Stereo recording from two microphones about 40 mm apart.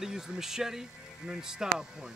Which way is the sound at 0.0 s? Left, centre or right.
Centre.